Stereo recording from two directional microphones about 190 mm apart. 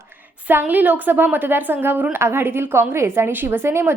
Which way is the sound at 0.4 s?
10° right (ahead or behind).